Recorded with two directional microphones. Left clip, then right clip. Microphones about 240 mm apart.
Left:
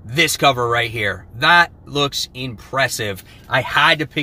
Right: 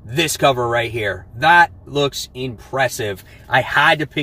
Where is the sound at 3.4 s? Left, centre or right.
Centre.